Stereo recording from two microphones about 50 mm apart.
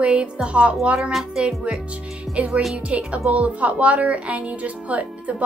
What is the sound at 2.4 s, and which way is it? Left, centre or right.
Speech, right.